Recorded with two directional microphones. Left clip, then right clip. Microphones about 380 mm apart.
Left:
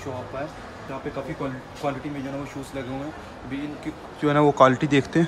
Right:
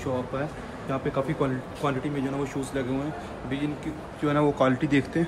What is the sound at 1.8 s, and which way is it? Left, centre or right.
Speech, centre.